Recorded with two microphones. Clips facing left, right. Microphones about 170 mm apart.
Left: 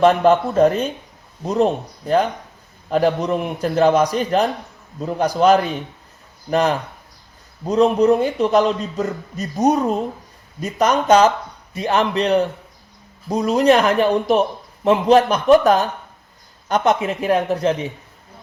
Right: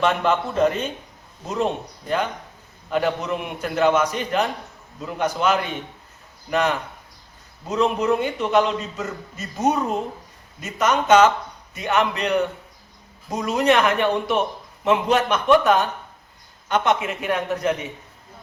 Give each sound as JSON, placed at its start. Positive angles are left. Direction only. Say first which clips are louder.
{"t": 0.0, "sound": "a man's voice", "louder": "left 7 dB", "side_deg": 40}
{"t": 2.9, "sound": "a man's voice", "louder": "left 5 dB", "side_deg": 35}